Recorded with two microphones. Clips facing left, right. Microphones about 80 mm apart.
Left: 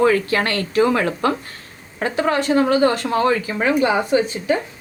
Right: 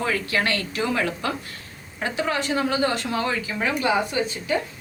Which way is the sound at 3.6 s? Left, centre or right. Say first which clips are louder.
Left 4 dB; left.